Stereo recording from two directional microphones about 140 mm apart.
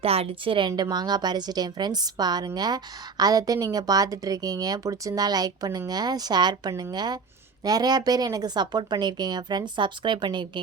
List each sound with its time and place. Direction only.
0.0 s a woman's voice: 45° right (ahead or behind)